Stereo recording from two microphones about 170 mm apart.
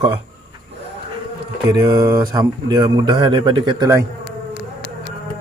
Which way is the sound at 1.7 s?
25° right (ahead or behind).